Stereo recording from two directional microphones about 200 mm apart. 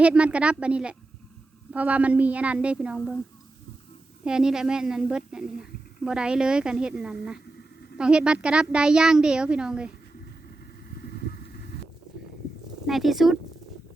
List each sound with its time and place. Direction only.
0.0 s a woman's voice: 5° right (ahead or behind)
4.2 s speech: 5° right (ahead or behind)
11.0 s vehicle: 50° left (ahead or behind)
12.8 s speech: centre (ahead or behind)